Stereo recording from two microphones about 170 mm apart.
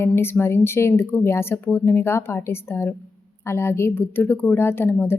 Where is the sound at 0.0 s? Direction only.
15° left (ahead or behind).